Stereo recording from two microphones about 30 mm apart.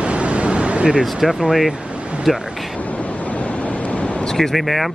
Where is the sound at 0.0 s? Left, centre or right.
Right.